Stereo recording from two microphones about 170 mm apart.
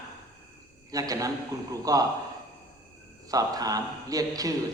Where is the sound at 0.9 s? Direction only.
20° right (ahead or behind).